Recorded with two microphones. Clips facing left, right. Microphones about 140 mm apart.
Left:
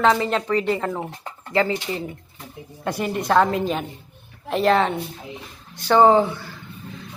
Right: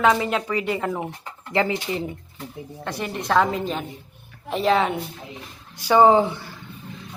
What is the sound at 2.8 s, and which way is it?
A woman's voice, 5° left (ahead or behind).